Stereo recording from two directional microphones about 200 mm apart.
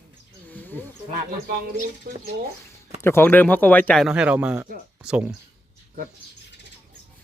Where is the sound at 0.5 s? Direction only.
10° left (ahead or behind).